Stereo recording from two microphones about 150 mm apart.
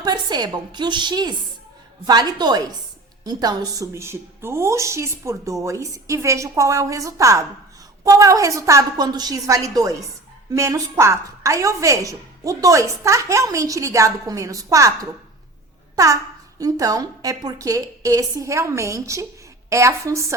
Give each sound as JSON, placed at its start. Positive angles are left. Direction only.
{"t": 0.0, "sound": "a woman's voice", "side_deg": -30}
{"t": 16.6, "sound": "a woman's voice", "side_deg": -25}